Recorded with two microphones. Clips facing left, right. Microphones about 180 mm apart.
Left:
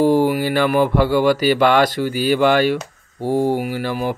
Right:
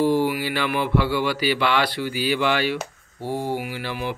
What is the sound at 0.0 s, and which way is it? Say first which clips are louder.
Speech: left 5 dB; 45° left (ahead or behind).